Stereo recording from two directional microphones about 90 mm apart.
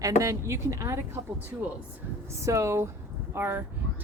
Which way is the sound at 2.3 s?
35° right (ahead or behind).